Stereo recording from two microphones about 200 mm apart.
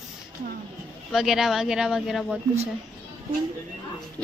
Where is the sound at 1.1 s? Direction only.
Centre (ahead or behind).